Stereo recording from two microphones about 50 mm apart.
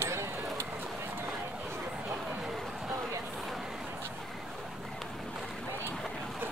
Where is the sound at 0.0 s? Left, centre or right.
Right.